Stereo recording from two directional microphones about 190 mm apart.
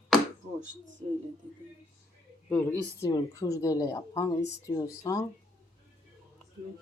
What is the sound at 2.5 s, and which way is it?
Speech, 10° left (ahead or behind).